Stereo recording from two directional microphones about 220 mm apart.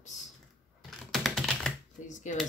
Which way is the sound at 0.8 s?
Centre (ahead or behind).